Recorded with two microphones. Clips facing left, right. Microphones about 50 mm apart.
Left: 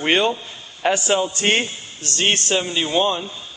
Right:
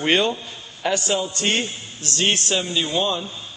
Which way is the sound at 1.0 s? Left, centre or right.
Left.